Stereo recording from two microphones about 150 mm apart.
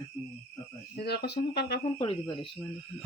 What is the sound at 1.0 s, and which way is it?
Speech, 90° left.